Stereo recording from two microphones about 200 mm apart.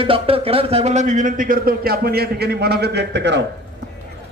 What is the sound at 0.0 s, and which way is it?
Speech, 25° right (ahead or behind).